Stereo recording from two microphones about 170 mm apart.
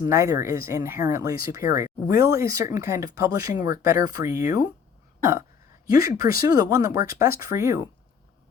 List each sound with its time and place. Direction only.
0.0 s speech: 20° right (ahead or behind)
5.8 s speech: 20° right (ahead or behind)